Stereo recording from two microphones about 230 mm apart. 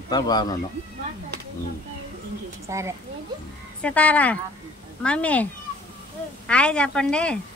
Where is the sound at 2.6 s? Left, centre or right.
Centre.